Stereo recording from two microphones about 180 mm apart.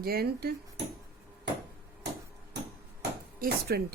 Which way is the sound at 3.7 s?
65° right (ahead or behind).